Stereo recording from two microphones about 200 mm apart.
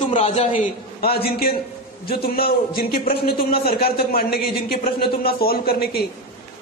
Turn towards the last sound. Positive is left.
turn(degrees=50)  # may be behind; listen again after turning